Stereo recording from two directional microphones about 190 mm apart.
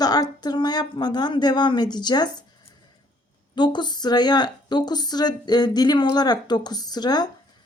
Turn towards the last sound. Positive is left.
turn(degrees=20)  # may be behind; listen again after turning